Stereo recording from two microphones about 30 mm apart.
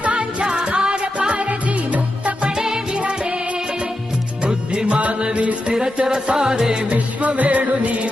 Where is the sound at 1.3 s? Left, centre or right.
Right.